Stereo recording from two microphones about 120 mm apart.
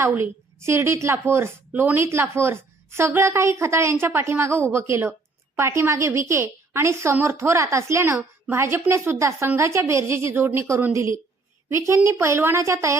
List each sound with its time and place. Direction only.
0.0 s a woman's voice: 20° right (ahead or behind)